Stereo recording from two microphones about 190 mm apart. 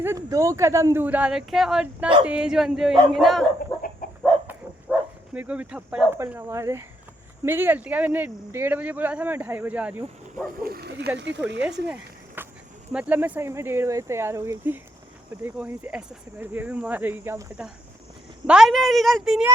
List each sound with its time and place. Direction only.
0.0 s a woman's voice: 15° right (ahead or behind); by 3.4 s centre (ahead or behind)
4.0 s chicken: 50° left (ahead or behind)
4.4 s speech: 10° right (ahead or behind)
10.6 s speech: 55° right (ahead or behind)
11.9 s a sound: 10° right (ahead or behind)
12.9 s a woman's voice: 5° right (ahead or behind)